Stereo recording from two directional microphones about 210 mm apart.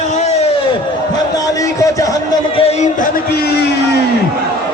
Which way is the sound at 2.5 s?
30° left (ahead or behind).